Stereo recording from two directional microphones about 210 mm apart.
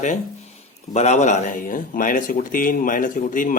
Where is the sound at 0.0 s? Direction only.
35° left (ahead or behind).